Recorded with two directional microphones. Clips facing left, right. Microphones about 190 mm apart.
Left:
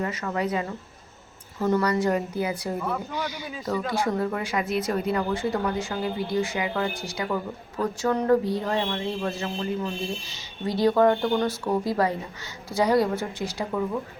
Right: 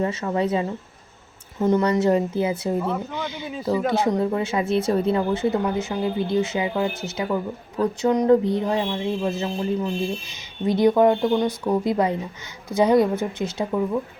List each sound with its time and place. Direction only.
0.0 s speech: 25° right (ahead or behind)